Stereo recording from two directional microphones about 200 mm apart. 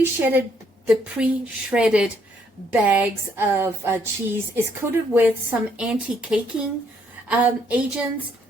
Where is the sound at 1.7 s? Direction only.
5° right (ahead or behind).